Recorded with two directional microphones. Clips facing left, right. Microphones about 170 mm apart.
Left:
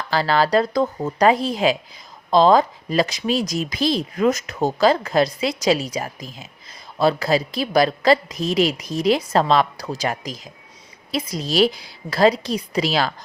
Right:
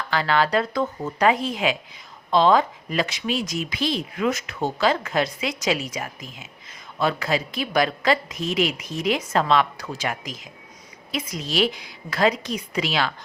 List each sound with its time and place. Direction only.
0.1 s speech: 35° left (ahead or behind)